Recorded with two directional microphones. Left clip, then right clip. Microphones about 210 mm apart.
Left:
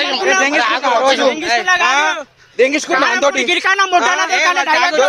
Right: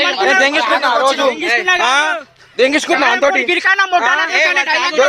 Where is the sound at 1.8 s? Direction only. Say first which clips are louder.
Even; 40° right (ahead or behind).